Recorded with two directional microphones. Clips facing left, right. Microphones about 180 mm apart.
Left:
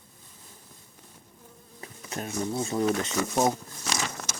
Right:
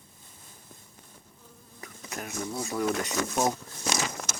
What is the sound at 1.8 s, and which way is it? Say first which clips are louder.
Speech: left 3 dB; 30° left (ahead or behind).